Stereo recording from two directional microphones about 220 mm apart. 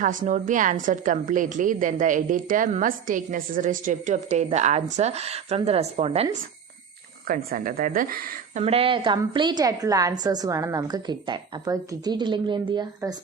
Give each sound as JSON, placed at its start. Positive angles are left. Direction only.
{"t": 0.0, "sound": "a woman's voice", "side_deg": -35}
{"t": 7.3, "sound": "a woman's voice", "side_deg": -40}
{"t": 8.6, "sound": "a woman's voice", "side_deg": -25}